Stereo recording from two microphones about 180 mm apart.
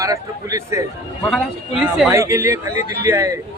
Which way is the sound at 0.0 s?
20° right (ahead or behind).